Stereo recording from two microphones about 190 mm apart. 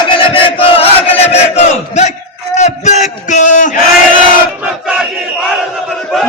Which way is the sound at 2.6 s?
35° left (ahead or behind).